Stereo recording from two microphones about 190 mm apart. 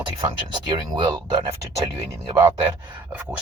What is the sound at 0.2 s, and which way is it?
Speech, 25° right (ahead or behind).